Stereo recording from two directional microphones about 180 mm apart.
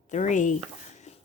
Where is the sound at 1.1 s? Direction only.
40° left (ahead or behind).